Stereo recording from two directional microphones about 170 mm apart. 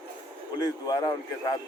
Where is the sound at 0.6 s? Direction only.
20° left (ahead or behind).